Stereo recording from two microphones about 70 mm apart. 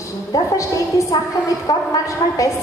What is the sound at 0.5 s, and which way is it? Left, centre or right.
A woman's voice, left.